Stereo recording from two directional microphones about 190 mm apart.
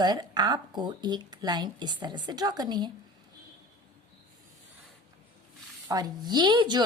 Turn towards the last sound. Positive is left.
turn(degrees=-25)  # may be behind; listen again after turning